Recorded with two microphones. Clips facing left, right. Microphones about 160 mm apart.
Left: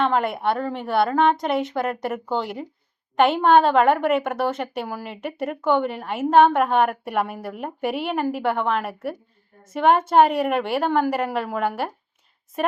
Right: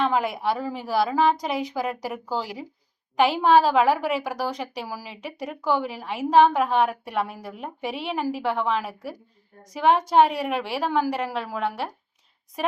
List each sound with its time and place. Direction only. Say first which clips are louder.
0.0 s a woman's voice: left 2 dB; centre (ahead or behind)